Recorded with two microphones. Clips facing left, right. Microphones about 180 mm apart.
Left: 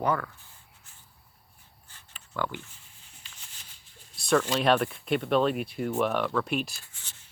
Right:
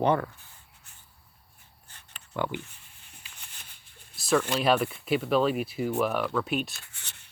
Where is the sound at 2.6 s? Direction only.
60° right (ahead or behind).